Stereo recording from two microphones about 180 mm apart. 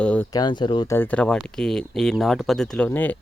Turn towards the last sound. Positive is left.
turn(degrees=10)  # may be behind; listen again after turning